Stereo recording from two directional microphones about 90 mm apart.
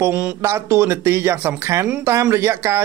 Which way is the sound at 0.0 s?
20° right (ahead or behind).